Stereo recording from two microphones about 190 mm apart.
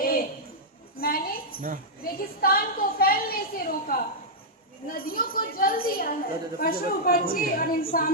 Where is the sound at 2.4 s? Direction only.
50° left (ahead or behind).